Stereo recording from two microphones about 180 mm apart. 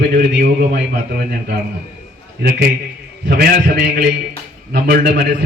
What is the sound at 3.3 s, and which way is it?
A man's voice, 60° right (ahead or behind).